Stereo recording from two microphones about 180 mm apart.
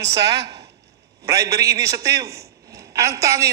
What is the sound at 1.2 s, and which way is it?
A man's voice, 20° right (ahead or behind).